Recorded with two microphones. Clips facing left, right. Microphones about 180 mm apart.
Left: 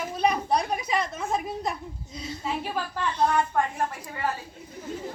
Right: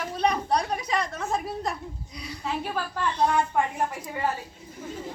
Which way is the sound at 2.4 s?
Centre (ahead or behind).